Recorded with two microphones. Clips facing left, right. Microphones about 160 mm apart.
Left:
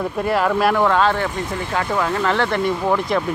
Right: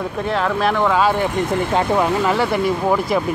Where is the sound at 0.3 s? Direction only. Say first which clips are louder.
Left 2 dB; 5° left (ahead or behind).